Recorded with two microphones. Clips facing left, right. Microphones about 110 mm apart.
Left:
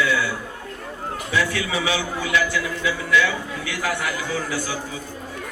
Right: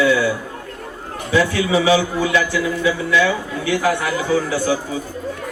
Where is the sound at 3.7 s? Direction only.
25° right (ahead or behind).